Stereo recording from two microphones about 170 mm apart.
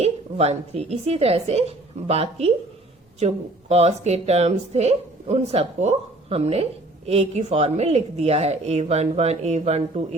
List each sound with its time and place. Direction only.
0.0 s speech: 40° right (ahead or behind)